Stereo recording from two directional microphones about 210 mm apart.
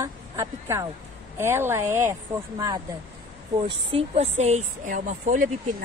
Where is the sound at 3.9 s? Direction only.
30° right (ahead or behind).